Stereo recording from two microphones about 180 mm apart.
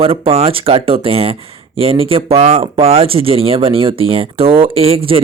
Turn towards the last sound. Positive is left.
turn(degrees=-30)  # may be behind; listen again after turning